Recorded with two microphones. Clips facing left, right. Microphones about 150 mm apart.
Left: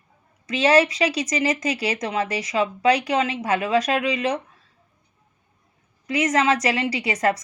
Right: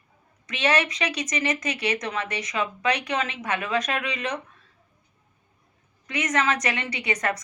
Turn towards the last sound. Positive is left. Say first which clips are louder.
# left 5 dB
turn(degrees=30)  # may be behind; listen again after turning